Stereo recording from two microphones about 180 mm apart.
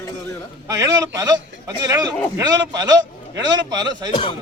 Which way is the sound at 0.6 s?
20° right (ahead or behind).